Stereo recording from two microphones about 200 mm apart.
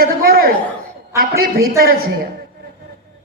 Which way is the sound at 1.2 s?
50° right (ahead or behind).